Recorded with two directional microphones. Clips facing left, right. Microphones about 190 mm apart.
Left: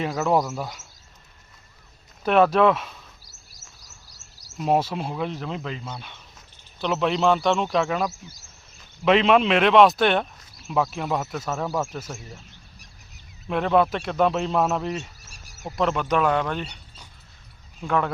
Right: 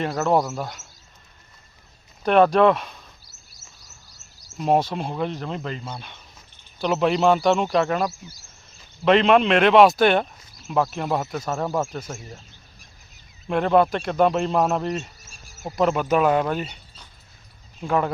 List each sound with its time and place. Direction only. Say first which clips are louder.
0.0 s speech: right 1 dB; 5° left (ahead or behind)
2.2 s speech: right 2 dB; 5° left (ahead or behind)
3.2 s a sound: even; 90° left
4.5 s speech: right 2 dB; centre (ahead or behind)
13.5 s speech: right 2 dB; centre (ahead or behind)